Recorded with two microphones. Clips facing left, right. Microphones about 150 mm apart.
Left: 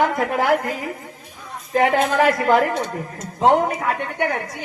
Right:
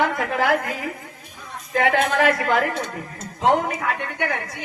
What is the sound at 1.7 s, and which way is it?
A woman's voice, 40° left (ahead or behind).